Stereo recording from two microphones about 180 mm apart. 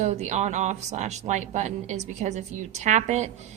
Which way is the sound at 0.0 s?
40° right (ahead or behind).